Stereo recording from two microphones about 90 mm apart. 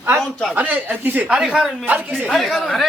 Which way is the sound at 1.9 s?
20° right (ahead or behind).